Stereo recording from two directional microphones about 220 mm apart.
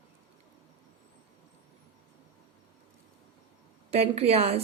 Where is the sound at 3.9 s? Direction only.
25° right (ahead or behind).